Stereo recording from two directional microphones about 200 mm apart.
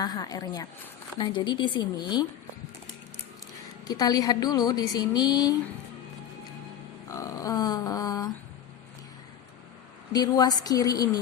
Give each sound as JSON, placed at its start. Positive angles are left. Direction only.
{"t": 0.0, "sound": "a woman's voice", "side_deg": 20}
{"t": 3.8, "sound": "a woman's voice", "side_deg": 20}
{"t": 7.1, "sound": "a sound", "side_deg": 15}
{"t": 10.1, "sound": "a woman's voice", "side_deg": 20}